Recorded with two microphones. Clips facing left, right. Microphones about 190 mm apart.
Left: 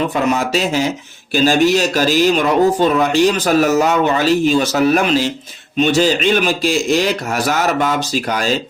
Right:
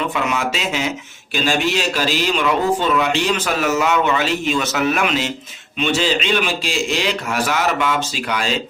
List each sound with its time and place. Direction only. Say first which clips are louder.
0.1 s speech: left 5 dB; 40° left (ahead or behind)